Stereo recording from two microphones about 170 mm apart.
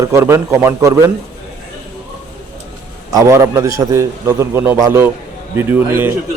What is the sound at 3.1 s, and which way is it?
A man's voice, 15° right (ahead or behind).